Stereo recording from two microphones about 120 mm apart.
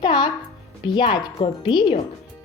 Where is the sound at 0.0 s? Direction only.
40° left (ahead or behind).